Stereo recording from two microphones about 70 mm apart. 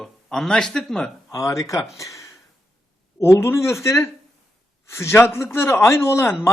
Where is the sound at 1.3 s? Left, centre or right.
Left.